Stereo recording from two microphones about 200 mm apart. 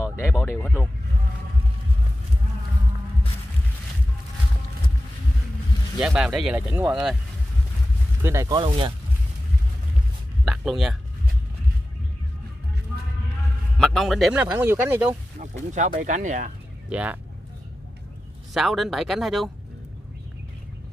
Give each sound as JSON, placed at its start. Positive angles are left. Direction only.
{"t": 0.2, "sound": "speech", "side_deg": 10}
{"t": 5.9, "sound": "speech", "side_deg": -5}
{"t": 8.2, "sound": "speech", "side_deg": -15}
{"t": 10.4, "sound": "speech", "side_deg": 0}
{"t": 13.7, "sound": "speech", "side_deg": 0}
{"t": 15.7, "sound": "speech", "side_deg": -40}
{"t": 16.9, "sound": "speech", "side_deg": -5}
{"t": 18.5, "sound": "speech", "side_deg": 0}